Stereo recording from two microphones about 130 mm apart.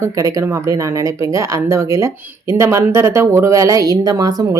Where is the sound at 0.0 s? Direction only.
25° right (ahead or behind).